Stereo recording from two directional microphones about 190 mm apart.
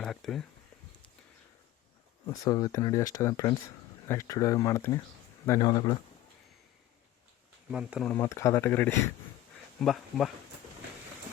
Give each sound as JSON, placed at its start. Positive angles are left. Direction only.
{"t": 0.0, "sound": "speech", "side_deg": 0}
{"t": 2.2, "sound": "speech", "side_deg": 20}
{"t": 7.7, "sound": "speech", "side_deg": -5}
{"t": 8.1, "sound": "speech", "side_deg": 15}
{"t": 9.8, "sound": "speech", "side_deg": 0}